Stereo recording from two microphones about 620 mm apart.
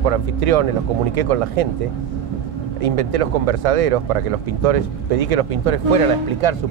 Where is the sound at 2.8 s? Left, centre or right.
Right.